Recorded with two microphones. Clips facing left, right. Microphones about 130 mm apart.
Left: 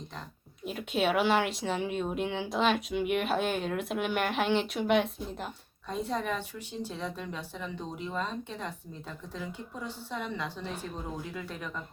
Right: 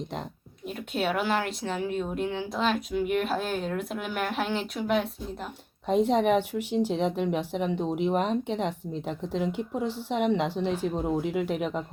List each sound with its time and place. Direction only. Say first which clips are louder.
0.6 s a woman's voice: even; centre (ahead or behind)
5.9 s speech: right 10 dB; 75° right (ahead or behind)